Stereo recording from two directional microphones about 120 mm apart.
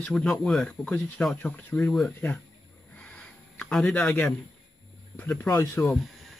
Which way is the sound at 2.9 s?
10° left (ahead or behind).